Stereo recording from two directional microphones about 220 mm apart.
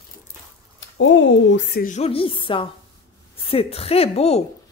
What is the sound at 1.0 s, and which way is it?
Speech, 60° left (ahead or behind).